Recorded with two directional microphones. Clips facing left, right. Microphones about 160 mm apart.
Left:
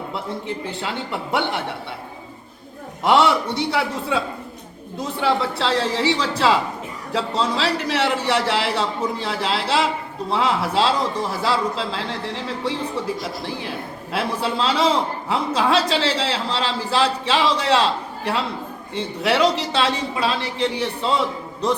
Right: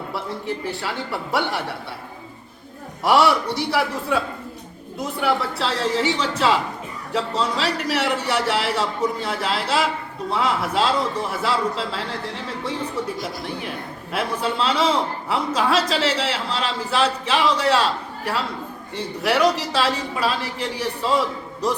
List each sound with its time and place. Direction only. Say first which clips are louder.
0.1 s a man's voice: right 3 dB; 20° left (ahead or behind)
3.0 s a man's voice: left 1 dB; 25° left (ahead or behind)
5.2 s a man's voice: left 2 dB; 25° left (ahead or behind)
14.1 s a man's voice: left 1 dB; 30° left (ahead or behind)
18.9 s a man's voice: left 1 dB; 25° left (ahead or behind)